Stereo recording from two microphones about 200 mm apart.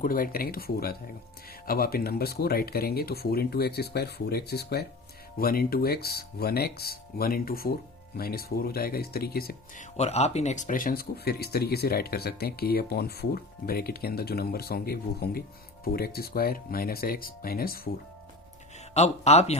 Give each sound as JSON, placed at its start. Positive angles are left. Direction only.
{"t": 0.0, "sound": "speech", "side_deg": 45}
{"t": 10.0, "sound": "speech", "side_deg": 35}
{"t": 18.9, "sound": "speech", "side_deg": 35}